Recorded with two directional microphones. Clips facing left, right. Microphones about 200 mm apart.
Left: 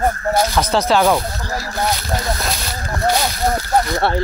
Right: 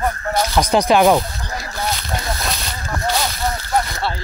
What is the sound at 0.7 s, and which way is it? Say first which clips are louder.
Speech: right 2 dB; 15° right (ahead or behind).